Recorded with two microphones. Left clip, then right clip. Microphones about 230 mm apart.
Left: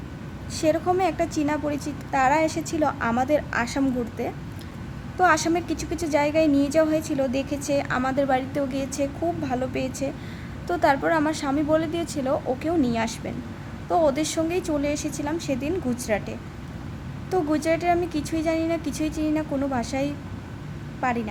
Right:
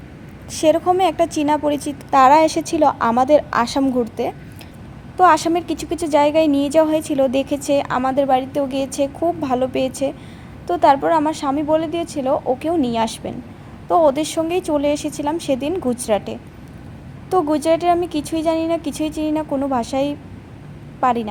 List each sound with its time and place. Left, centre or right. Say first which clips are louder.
0.5 s a woman's voice: right 7 dB; right